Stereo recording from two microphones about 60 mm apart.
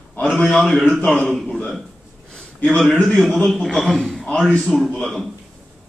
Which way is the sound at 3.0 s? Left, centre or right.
Centre.